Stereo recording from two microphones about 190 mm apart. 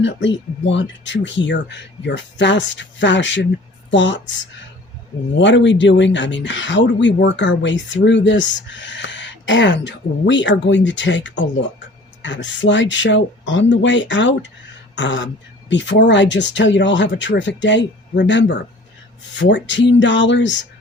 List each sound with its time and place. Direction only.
0.0 s speech: 70° left (ahead or behind)
5.4 s speech: 70° left (ahead or behind)